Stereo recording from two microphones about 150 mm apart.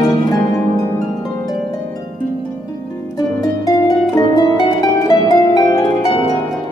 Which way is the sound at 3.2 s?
25° left (ahead or behind).